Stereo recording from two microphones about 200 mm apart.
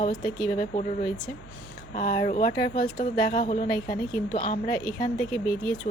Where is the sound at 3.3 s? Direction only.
40° left (ahead or behind).